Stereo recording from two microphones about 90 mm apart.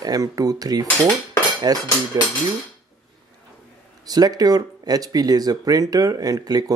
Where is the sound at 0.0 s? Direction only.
45° right (ahead or behind).